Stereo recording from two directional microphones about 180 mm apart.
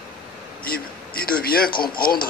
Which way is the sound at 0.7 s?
55° left (ahead or behind).